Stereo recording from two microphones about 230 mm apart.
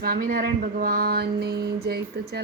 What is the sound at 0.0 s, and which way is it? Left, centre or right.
Mantra, right.